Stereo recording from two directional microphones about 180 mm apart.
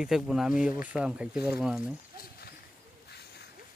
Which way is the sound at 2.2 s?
60° left (ahead or behind).